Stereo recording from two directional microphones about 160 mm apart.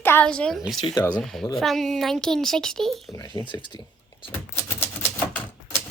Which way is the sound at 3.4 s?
20° left (ahead or behind).